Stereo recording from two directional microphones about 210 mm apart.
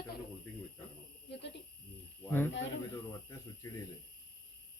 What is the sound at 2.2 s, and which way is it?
Speech, 10° left (ahead or behind).